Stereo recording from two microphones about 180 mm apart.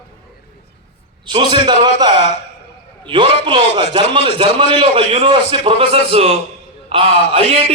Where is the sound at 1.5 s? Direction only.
25° right (ahead or behind).